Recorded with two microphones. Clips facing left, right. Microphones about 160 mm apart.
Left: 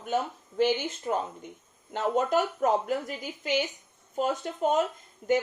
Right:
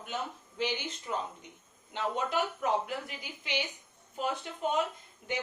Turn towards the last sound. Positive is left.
turn(degrees=45)  # may be behind; listen again after turning